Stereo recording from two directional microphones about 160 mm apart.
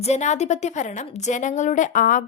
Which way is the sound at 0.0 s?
45° left (ahead or behind).